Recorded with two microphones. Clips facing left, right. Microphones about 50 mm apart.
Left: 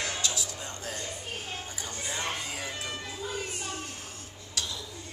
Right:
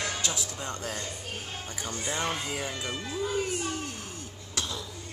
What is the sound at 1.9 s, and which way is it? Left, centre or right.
Speech, right.